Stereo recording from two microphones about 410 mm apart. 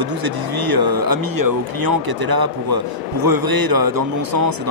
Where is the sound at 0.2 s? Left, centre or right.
Right.